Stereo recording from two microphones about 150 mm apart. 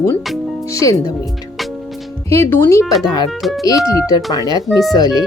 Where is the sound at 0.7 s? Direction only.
20° left (ahead or behind).